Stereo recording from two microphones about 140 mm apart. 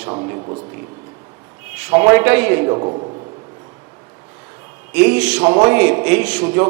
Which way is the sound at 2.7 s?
35° right (ahead or behind).